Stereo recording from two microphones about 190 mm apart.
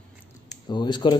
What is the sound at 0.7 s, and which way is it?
Speech, 25° left (ahead or behind).